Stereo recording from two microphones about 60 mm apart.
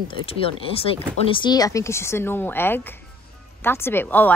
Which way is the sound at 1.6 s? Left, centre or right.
Left.